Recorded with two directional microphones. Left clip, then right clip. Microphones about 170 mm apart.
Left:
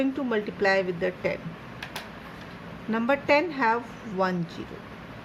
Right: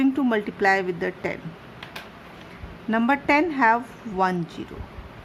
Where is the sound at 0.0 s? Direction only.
45° right (ahead or behind).